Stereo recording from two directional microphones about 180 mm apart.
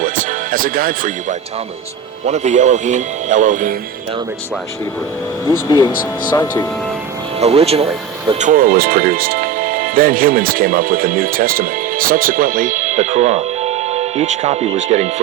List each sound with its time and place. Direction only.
0.0 s speech: 50° right (ahead or behind)
5.6 s speech: 20° left (ahead or behind)
7.3 s speech: 35° right (ahead or behind)
8.4 s speech: 50° right (ahead or behind)